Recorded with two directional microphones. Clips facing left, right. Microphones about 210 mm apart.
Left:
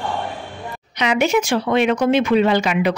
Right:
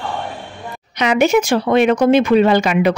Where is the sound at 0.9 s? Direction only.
45° right (ahead or behind).